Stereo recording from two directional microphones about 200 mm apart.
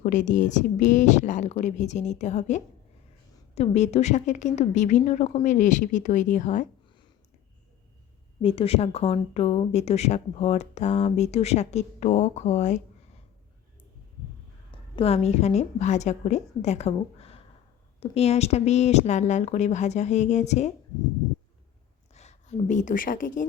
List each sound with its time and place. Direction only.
0.0 s speech: 40° left (ahead or behind)
8.4 s speech: 30° left (ahead or behind)
14.7 s a woman's voice: 30° left (ahead or behind)
22.1 s speech: 35° left (ahead or behind)